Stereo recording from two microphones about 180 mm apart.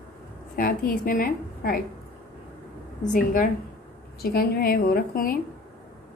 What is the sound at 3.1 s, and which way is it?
Speech, 50° left (ahead or behind).